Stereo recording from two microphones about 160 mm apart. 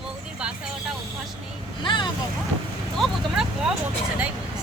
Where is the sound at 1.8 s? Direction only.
30° left (ahead or behind).